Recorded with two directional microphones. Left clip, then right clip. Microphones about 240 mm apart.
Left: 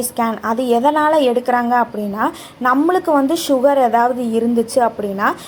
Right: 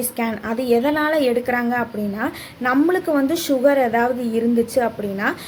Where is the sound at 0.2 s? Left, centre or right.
Centre.